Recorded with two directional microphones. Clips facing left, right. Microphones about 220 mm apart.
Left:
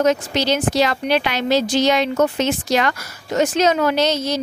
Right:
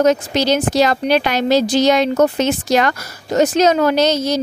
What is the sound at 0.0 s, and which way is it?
A woman's voice, 40° right (ahead or behind).